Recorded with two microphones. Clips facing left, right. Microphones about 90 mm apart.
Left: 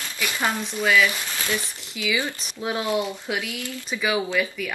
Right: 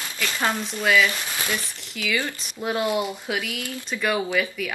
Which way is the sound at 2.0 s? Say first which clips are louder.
Left 1 dB; 15° left (ahead or behind).